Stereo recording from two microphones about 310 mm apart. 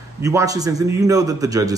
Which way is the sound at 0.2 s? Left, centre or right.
Centre.